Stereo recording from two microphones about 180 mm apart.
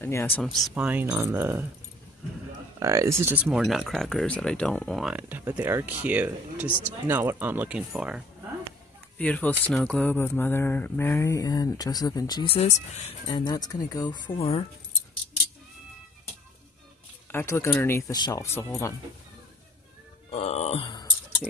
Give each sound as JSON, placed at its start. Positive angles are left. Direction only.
{"t": 0.0, "sound": "speech", "side_deg": 15}
{"t": 0.4, "sound": "speech", "side_deg": 0}
{"t": 2.8, "sound": "speech", "side_deg": -20}
{"t": 9.2, "sound": "speech", "side_deg": 10}
{"t": 13.3, "sound": "speech", "side_deg": 25}
{"t": 17.3, "sound": "speech", "side_deg": 15}
{"t": 17.6, "sound": "speech", "side_deg": 5}
{"t": 17.9, "sound": "speech", "side_deg": 20}
{"t": 20.2, "sound": "speech", "side_deg": 35}